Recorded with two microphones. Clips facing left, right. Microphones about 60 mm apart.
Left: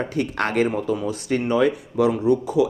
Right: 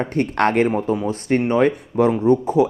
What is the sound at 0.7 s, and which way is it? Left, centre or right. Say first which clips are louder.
Speech: right 3 dB; right.